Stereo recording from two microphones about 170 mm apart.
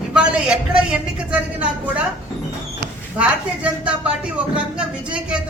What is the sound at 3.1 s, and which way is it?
Speech, 5° right (ahead or behind).